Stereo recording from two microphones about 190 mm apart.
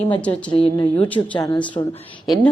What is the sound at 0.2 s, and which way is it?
A woman's voice, 5° left (ahead or behind).